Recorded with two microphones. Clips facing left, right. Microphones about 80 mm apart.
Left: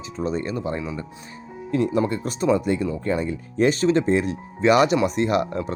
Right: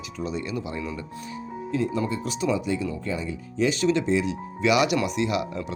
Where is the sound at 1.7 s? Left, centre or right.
Left.